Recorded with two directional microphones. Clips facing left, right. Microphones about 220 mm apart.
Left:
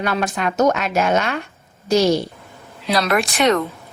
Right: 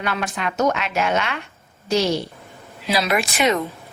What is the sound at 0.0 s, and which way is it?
A woman's voice, 40° left (ahead or behind).